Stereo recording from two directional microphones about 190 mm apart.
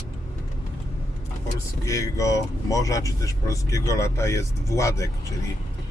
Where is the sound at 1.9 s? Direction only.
15° left (ahead or behind).